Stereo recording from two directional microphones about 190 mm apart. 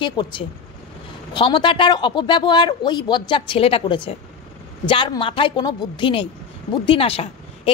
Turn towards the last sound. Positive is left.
turn(degrees=30)  # may be behind; listen again after turning